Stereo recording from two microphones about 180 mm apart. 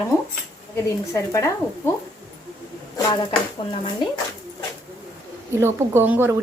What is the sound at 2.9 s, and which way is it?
Speech, 25° left (ahead or behind).